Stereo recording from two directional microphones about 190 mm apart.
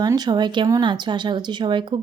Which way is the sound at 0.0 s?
20° right (ahead or behind).